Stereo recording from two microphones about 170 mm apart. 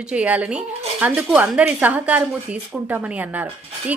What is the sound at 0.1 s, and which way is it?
Speech, 10° right (ahead or behind).